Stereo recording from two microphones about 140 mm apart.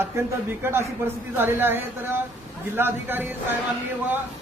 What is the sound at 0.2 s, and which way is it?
Speech, 20° right (ahead or behind).